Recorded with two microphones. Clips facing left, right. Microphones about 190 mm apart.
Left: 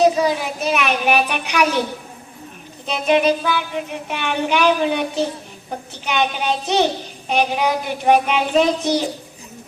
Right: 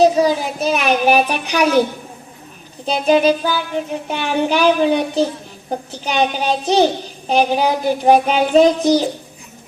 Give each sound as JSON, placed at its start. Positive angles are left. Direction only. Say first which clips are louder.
{"t": 0.0, "sound": "child singing", "louder": "right 3 dB", "side_deg": -35}
{"t": 2.8, "sound": "child singing", "louder": "right 3 dB", "side_deg": -35}